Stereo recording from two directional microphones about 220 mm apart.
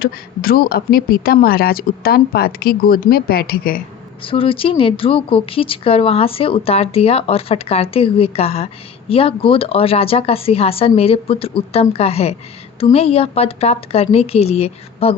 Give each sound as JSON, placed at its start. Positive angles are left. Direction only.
{"t": 0.0, "sound": "speech", "side_deg": 40}
{"t": 4.2, "sound": "speech", "side_deg": 25}